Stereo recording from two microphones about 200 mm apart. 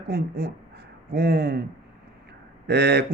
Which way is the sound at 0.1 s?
50° right (ahead or behind).